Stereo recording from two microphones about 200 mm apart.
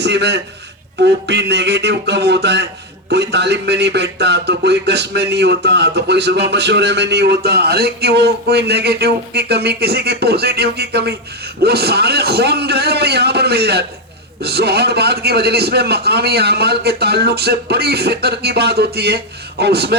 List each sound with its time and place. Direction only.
0.0 s a man's voice: 60° right (ahead or behind)